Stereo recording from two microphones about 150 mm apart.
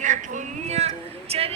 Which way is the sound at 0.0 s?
55° right (ahead or behind).